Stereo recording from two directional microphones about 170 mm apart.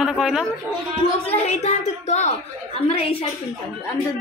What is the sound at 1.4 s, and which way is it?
A woman's voice, 40° left (ahead or behind).